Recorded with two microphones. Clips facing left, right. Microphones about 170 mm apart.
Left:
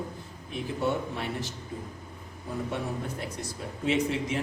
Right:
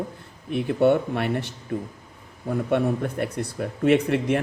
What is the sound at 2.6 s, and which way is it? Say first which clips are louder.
A man's voice: right 12 dB; 60° right (ahead or behind).